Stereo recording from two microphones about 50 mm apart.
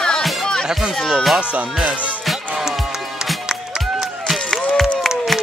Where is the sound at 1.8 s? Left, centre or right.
Right.